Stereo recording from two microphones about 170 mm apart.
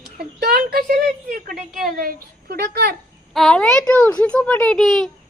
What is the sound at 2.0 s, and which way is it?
Speech, 60° right (ahead or behind).